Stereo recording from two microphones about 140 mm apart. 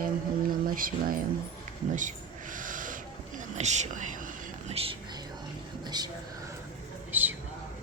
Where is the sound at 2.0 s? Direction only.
70° right (ahead or behind).